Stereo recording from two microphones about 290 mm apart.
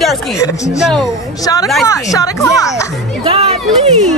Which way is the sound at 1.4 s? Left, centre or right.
Centre.